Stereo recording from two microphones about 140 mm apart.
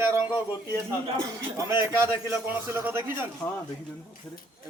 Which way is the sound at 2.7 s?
15° right (ahead or behind).